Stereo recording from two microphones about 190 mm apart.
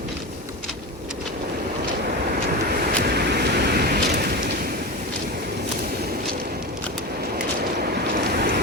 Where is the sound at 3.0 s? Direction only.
55° right (ahead or behind).